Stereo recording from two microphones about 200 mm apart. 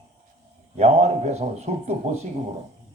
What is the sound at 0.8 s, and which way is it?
A man's voice, 35° right (ahead or behind).